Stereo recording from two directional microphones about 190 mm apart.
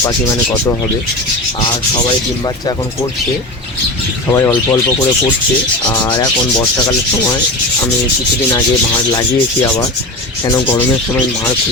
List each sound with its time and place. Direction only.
4.3 s speech: 15° left (ahead or behind)
6.1 s rub: 20° left (ahead or behind)
9.1 s rub: 20° left (ahead or behind)